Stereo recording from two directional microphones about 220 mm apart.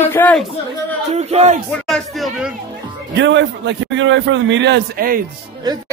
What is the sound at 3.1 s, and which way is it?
A man's voice, 55° right (ahead or behind).